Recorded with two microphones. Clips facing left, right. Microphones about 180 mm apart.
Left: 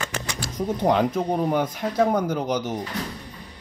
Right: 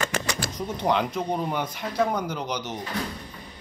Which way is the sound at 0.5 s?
45° left (ahead or behind).